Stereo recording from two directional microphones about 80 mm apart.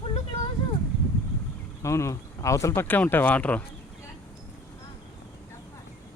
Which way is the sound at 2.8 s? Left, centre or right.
Left.